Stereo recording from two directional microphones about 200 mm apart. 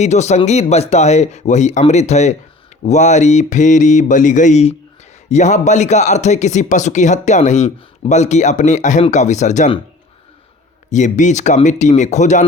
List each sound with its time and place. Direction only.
0.0 s speech: 35° left (ahead or behind)
10.9 s speech: 35° left (ahead or behind)